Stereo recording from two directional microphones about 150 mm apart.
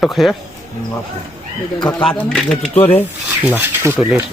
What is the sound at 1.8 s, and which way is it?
Speech, 30° left (ahead or behind).